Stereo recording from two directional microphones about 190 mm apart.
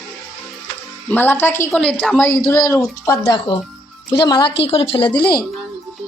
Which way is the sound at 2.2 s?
15° left (ahead or behind).